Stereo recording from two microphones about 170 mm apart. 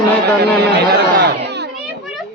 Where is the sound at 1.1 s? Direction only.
75° right (ahead or behind).